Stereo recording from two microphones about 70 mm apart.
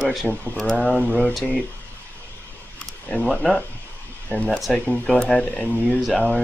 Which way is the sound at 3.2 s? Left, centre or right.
Centre.